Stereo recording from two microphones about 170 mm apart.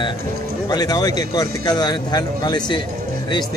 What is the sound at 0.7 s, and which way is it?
Speech, 20° left (ahead or behind).